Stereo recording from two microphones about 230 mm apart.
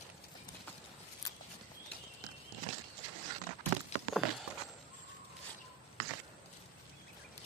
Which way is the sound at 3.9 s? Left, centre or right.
Left.